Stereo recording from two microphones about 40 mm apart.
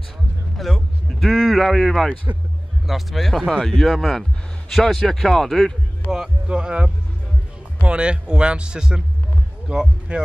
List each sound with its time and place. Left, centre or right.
0.6 s a sound: centre
2.3 s a man's voice: right
2.9 s a man's voice: centre
6.0 s speech: left
6.4 s speech: right